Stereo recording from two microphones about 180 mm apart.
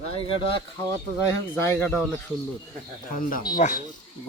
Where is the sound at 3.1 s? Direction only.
50° left (ahead or behind).